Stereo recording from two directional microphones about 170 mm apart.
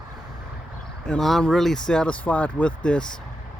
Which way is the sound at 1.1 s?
Centre (ahead or behind).